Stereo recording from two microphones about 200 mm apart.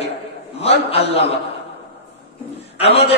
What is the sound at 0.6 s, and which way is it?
Speech, 30° left (ahead or behind).